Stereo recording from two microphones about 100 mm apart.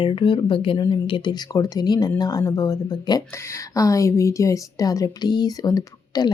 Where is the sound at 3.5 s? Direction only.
30° left (ahead or behind).